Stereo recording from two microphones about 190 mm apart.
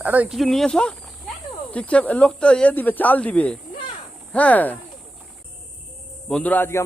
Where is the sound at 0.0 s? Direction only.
10° right (ahead or behind); by 4.8 s 10° left (ahead or behind).